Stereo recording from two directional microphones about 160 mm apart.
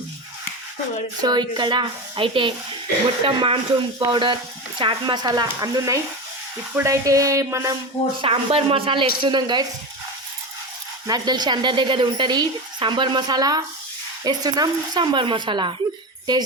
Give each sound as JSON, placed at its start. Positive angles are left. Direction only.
{"t": 1.2, "sound": "a woman's voice", "side_deg": -25}
{"t": 8.2, "sound": "a woman's voice", "side_deg": -35}
{"t": 11.0, "sound": "a woman's voice", "side_deg": -25}